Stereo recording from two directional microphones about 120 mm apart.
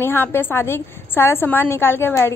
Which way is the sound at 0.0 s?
20° left (ahead or behind).